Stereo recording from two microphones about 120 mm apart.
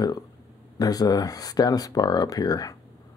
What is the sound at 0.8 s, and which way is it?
Speech, 30° left (ahead or behind).